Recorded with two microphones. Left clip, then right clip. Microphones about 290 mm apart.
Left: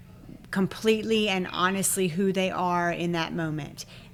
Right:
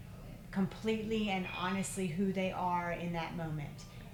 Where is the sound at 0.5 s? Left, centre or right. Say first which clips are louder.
Left 12 dB; left.